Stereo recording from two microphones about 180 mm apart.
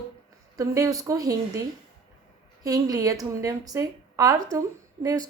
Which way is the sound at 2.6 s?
20° right (ahead or behind).